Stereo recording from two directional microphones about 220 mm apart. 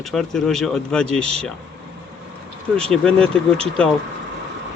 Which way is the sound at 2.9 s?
5° left (ahead or behind).